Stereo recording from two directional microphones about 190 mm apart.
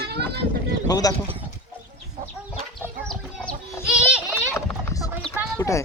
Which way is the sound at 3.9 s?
5° right (ahead or behind).